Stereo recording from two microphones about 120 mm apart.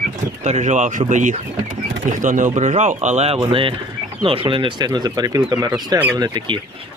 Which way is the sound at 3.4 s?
45° right (ahead or behind).